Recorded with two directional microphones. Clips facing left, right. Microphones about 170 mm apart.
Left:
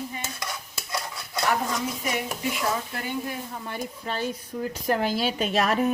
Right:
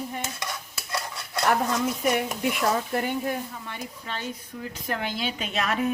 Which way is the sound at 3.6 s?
40° left (ahead or behind).